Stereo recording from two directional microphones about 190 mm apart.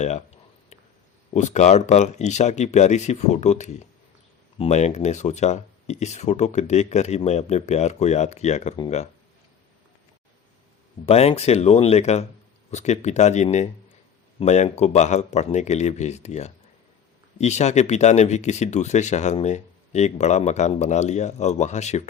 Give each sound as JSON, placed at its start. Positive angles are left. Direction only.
{"t": 1.3, "sound": "speech", "side_deg": 40}
{"t": 11.0, "sound": "speech", "side_deg": 35}